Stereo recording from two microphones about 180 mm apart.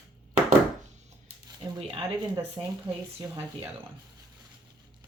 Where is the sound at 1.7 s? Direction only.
25° right (ahead or behind).